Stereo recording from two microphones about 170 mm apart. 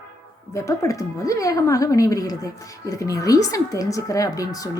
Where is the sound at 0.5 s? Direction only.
20° left (ahead or behind).